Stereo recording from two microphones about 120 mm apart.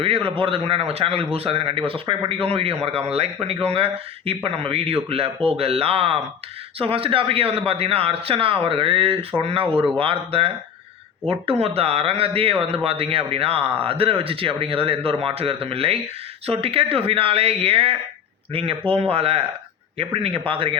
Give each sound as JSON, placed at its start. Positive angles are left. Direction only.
{"t": 0.0, "sound": "speech", "side_deg": -50}